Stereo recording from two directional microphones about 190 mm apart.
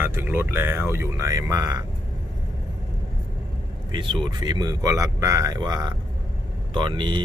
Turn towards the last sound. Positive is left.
turn(degrees=-25)  # may be behind; listen again after turning